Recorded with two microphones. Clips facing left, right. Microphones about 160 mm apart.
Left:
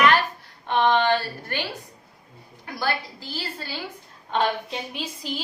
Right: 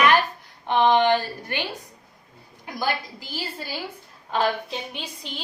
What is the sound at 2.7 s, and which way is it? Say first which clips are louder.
A woman's voice: even; 15° right (ahead or behind).